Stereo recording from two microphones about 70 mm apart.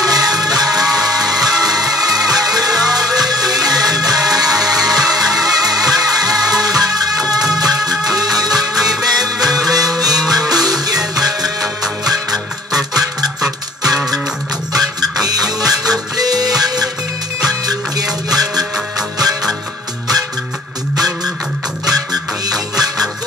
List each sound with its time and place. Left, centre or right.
0.0 s music: right
21.8 s music: right